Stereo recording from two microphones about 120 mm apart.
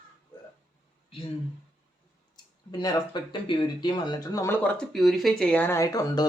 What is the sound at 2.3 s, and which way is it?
Speech, 35° left (ahead or behind).